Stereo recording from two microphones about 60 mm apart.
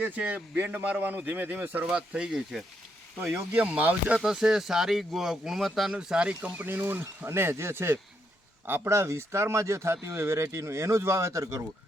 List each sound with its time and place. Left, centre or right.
0.0 s speech: right
0.5 s speech: right
1.9 s speech: centre
3.5 s speech: right
4.2 s speech: centre
5.9 s speech: centre
6.4 s speech: right
7.3 s speech: right